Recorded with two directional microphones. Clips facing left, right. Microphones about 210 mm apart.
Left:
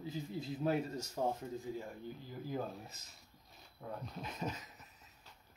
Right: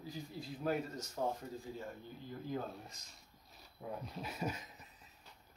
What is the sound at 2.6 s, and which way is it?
Speech, 5° left (ahead or behind).